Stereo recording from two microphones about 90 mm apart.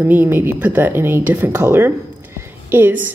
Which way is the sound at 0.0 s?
20° right (ahead or behind).